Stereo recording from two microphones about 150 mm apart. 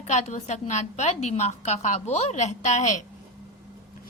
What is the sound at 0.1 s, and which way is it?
A woman's voice, 50° left (ahead or behind).